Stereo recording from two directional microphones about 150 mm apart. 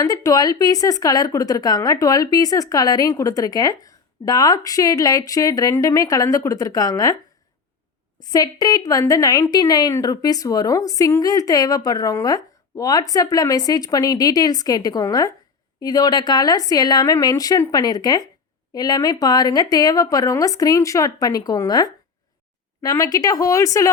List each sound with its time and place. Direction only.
0.0 s speech: 25° left (ahead or behind)
8.2 s speech: 25° left (ahead or behind)